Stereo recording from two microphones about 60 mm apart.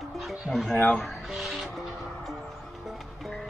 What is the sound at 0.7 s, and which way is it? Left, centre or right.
Speech, left.